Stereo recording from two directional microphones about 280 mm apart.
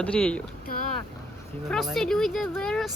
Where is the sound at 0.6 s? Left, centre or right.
Left.